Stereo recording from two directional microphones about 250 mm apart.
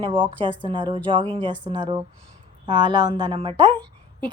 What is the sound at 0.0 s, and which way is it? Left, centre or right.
A woman's voice, centre.